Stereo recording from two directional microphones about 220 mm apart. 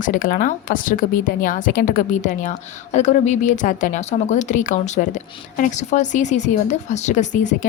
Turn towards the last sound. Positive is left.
turn(degrees=35)  # may be behind; listen again after turning